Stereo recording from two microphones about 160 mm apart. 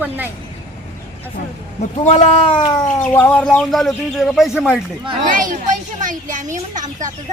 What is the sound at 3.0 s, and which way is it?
Speech, 10° left (ahead or behind).